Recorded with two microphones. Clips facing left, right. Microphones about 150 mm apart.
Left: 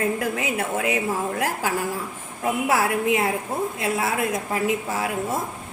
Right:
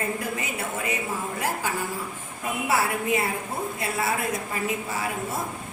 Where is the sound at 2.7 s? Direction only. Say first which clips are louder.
Left 2 dB; 90° left.